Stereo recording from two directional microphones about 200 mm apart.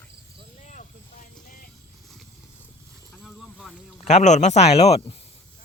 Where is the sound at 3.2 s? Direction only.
Centre (ahead or behind).